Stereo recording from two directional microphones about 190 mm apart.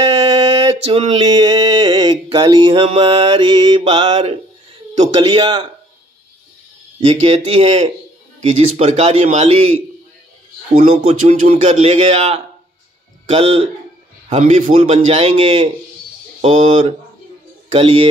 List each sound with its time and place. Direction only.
0.0 s a sound: 20° right (ahead or behind)
7.1 s speech: 35° right (ahead or behind)
10.9 s speech: 30° right (ahead or behind)